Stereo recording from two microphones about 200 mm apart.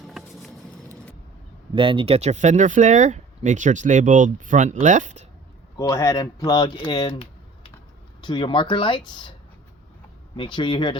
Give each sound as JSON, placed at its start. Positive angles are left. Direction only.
{"t": 0.0, "sound": "a sound", "side_deg": 0}
{"t": 1.7, "sound": "speech", "side_deg": -25}
{"t": 5.7, "sound": "speech", "side_deg": 20}
{"t": 8.2, "sound": "speech", "side_deg": 20}
{"t": 10.3, "sound": "speech", "side_deg": 25}